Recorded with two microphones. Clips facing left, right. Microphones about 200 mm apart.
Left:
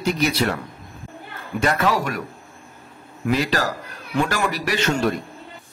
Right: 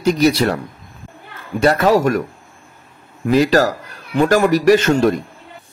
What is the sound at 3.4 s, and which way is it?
A man's voice, 45° right (ahead or behind).